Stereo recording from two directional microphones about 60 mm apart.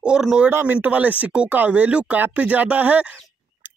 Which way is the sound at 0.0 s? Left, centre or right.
Centre.